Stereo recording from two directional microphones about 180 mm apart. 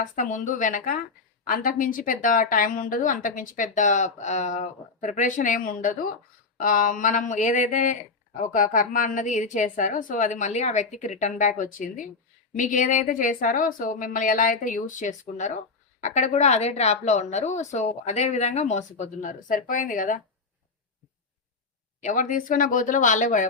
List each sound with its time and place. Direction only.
0.0 s speech: 45° left (ahead or behind)
22.0 s speech: 45° left (ahead or behind)